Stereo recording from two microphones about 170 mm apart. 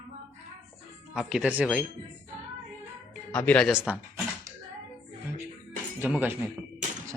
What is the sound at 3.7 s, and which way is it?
Speech, 5° right (ahead or behind).